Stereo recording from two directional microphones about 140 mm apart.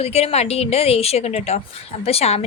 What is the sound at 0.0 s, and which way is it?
A woman's voice, 45° left (ahead or behind).